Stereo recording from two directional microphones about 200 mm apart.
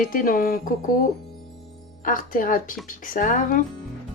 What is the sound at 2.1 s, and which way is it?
A woman's voice, 45° left (ahead or behind).